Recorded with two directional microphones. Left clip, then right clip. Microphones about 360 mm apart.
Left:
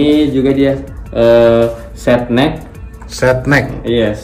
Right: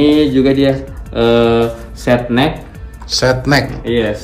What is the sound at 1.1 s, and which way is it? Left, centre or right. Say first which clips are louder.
Speech: left 4 dB; centre.